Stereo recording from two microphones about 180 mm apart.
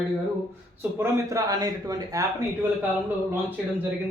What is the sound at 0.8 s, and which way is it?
A man's voice, 15° right (ahead or behind).